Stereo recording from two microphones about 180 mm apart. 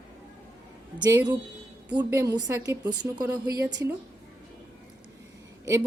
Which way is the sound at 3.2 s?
5° right (ahead or behind).